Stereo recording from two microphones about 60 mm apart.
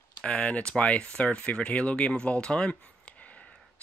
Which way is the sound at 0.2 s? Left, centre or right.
Left.